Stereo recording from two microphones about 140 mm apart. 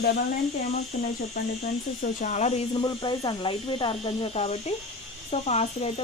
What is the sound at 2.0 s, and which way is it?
Speech, 60° left (ahead or behind).